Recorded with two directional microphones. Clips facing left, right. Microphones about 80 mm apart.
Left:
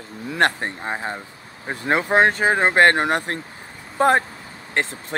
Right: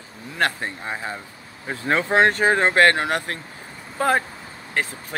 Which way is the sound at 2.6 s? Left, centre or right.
Left.